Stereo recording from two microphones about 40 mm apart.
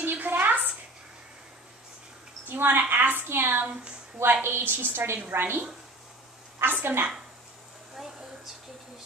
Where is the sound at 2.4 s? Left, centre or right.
Right.